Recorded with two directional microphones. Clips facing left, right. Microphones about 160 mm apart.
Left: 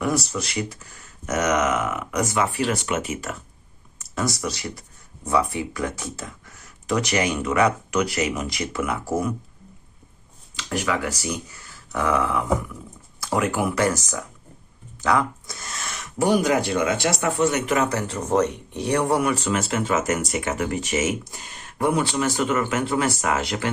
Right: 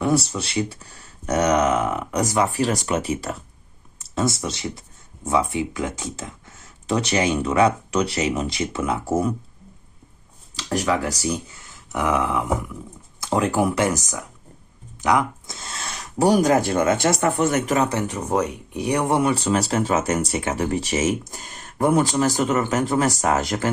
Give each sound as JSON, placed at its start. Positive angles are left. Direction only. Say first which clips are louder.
{"t": 0.0, "sound": "speech", "louder": "right 3 dB", "side_deg": -30}
{"t": 10.5, "sound": "speech", "louder": "right 3 dB", "side_deg": -40}
{"t": 11.5, "sound": "a sound", "louder": "right 1 dB", "side_deg": -20}
{"t": 13.7, "sound": "speech", "louder": "even", "side_deg": -20}
{"t": 17.7, "sound": "speech", "louder": "right 1 dB", "side_deg": -25}
{"t": 18.0, "sound": "speech", "louder": "left 1 dB", "side_deg": -15}